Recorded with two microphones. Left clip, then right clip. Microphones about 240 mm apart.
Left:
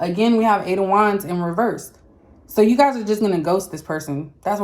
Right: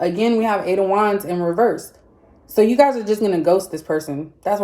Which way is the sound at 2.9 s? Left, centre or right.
Centre.